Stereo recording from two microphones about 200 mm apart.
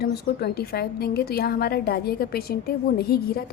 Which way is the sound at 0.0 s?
50° left (ahead or behind).